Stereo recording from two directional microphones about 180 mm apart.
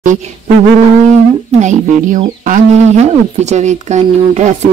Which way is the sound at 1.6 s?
40° right (ahead or behind).